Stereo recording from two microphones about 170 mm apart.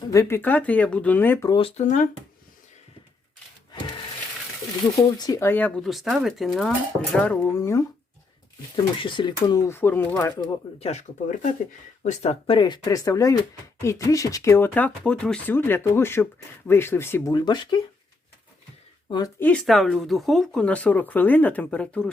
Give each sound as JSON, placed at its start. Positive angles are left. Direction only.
{"t": 0.1, "sound": "speech", "side_deg": 15}
{"t": 1.5, "sound": "speech", "side_deg": 30}
{"t": 1.8, "sound": "speech", "side_deg": 50}
{"t": 4.9, "sound": "speech", "side_deg": 25}
{"t": 7.6, "sound": "speech", "side_deg": 20}
{"t": 8.7, "sound": "speech", "side_deg": 30}
{"t": 10.8, "sound": "speech", "side_deg": 40}
{"t": 12.0, "sound": "speech", "side_deg": 40}
{"t": 19.4, "sound": "speech", "side_deg": 5}